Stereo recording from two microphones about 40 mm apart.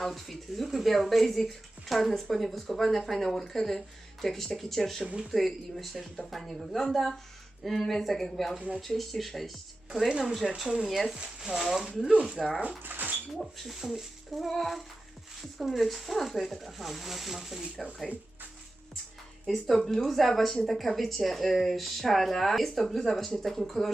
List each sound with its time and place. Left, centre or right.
0.0 s speech: centre
10.1 s speech: centre
10.6 s speech: centre
10.8 s speech: centre
12.8 s speech: right
13.4 s speech: centre
17.8 s speech: centre
19.5 s speech: centre